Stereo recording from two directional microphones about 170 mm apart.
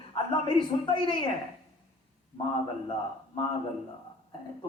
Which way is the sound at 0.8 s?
25° left (ahead or behind).